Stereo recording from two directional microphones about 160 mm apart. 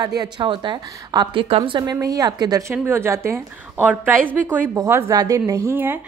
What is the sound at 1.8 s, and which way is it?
A woman's voice, 20° right (ahead or behind).